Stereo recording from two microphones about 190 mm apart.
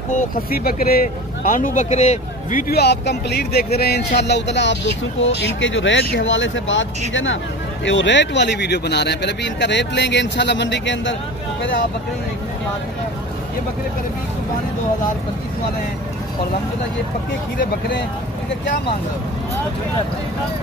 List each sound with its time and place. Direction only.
0.1 s speech: 50° left (ahead or behind)
2.7 s speech: 60° left (ahead or behind); by 7.3 s 85° left
7.8 s speech: 75° left (ahead or behind)